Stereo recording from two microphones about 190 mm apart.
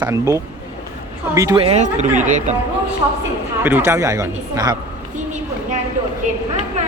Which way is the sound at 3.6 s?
10° right (ahead or behind).